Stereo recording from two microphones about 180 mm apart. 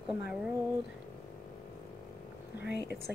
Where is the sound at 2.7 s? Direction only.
65° left (ahead or behind).